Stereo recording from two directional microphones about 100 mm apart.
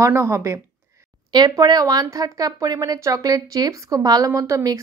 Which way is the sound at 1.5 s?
40° right (ahead or behind).